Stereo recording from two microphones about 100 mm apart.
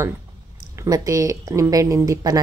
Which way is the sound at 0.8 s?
35° right (ahead or behind).